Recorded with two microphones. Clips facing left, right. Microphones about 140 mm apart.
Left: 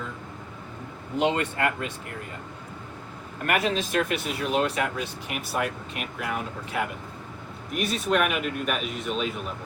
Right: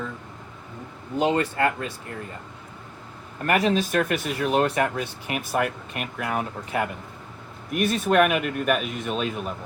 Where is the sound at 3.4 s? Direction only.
35° right (ahead or behind).